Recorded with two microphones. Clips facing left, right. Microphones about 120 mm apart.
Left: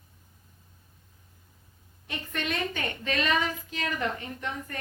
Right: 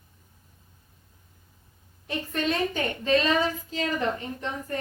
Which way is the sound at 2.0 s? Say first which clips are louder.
Right 6 dB; 30° right (ahead or behind).